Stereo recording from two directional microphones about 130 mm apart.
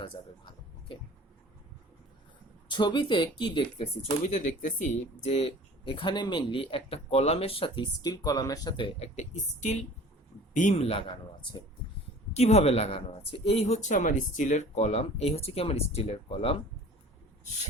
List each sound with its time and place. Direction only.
0.9 s speech: 40° left (ahead or behind)
2.6 s speech: 40° left (ahead or behind)
4.9 s speech: 55° left (ahead or behind); by 8.9 s 35° left (ahead or behind)
9.0 s speech: 60° left (ahead or behind)
12.3 s speech: 55° left (ahead or behind)